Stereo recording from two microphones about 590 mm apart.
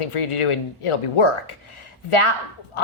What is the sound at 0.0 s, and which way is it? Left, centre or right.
A woman's voice, left.